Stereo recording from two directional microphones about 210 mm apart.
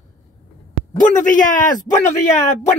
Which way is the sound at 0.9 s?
40° left (ahead or behind).